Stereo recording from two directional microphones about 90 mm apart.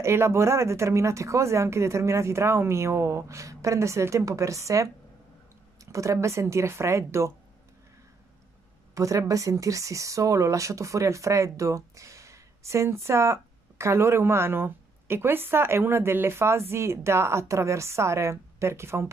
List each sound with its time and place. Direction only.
0.0 s speech: 30° right (ahead or behind)
5.9 s speech: 35° right (ahead or behind)
8.9 s speech: 40° right (ahead or behind)